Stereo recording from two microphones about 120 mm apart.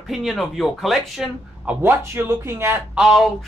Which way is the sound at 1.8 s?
20° right (ahead or behind).